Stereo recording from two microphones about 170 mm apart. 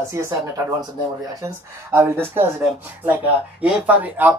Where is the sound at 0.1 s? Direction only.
15° right (ahead or behind).